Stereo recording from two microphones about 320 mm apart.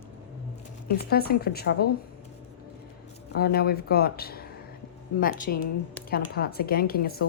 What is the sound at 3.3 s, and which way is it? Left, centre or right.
A woman's voice, left.